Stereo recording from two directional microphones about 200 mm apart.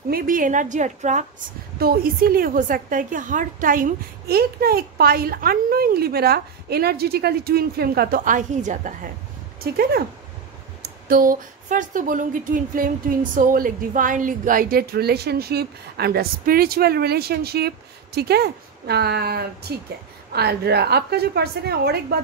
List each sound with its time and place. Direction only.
0.1 s a woman's voice: 45° right (ahead or behind)
1.8 s a woman's voice: 50° right (ahead or behind)
9.6 s a woman's voice: 50° right (ahead or behind)